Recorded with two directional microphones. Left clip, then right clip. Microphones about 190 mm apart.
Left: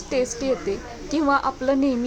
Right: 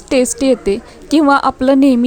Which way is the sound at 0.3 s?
45° right (ahead or behind).